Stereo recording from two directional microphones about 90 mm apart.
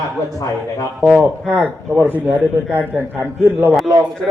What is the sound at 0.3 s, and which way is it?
Speech, 40° left (ahead or behind).